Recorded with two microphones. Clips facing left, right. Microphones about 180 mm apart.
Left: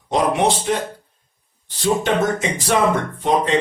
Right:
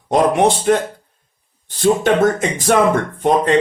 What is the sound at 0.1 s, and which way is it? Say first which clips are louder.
Speech: right 4 dB; 50° right (ahead or behind).